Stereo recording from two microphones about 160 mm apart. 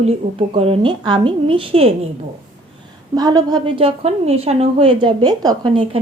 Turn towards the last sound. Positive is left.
turn(degrees=-30)  # may be behind; listen again after turning